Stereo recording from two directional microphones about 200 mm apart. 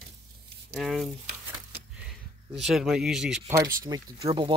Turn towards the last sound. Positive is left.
turn(degrees=-20)  # may be behind; listen again after turning